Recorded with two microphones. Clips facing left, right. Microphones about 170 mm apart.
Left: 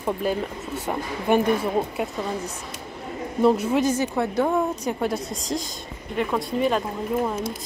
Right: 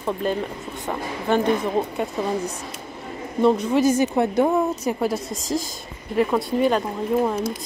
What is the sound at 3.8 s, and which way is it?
Speech, 10° right (ahead or behind).